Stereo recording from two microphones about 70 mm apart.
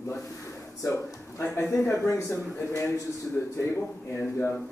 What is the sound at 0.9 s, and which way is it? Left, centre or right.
Speech, left.